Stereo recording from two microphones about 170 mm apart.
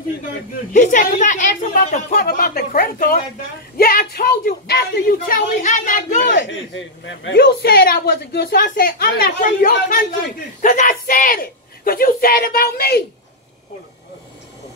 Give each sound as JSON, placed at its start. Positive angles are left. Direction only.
{"t": 0.7, "sound": "a woman's voice", "side_deg": 45}
{"t": 2.2, "sound": "a woman's voice", "side_deg": 65}
{"t": 6.3, "sound": "a man's voice", "side_deg": 90}
{"t": 7.2, "sound": "a woman's voice", "side_deg": 70}